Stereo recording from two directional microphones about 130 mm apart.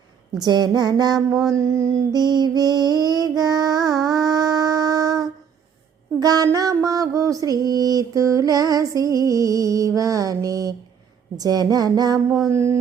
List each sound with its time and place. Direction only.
0.3 s speech: 30° right (ahead or behind)
1.3 s mantra: 25° right (ahead or behind)